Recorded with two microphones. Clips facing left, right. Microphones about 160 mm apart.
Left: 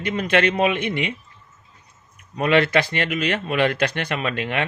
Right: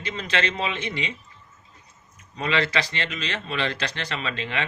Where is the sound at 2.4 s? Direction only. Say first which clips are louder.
Left 7 dB; 55° left (ahead or behind).